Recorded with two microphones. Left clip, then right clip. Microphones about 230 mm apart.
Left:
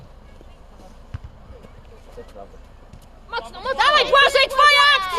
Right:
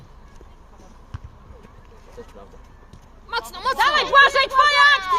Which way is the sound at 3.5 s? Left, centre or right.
Right.